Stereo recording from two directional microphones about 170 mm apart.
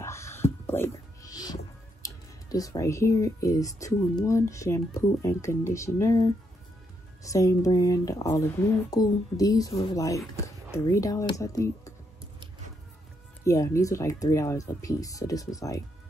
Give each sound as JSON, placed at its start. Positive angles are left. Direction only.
{"t": 0.0, "sound": "music", "side_deg": 15}
{"t": 2.0, "sound": "speech", "side_deg": 20}
{"t": 13.4, "sound": "speech", "side_deg": 20}